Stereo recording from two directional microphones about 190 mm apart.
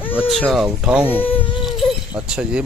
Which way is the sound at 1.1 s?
10° left (ahead or behind).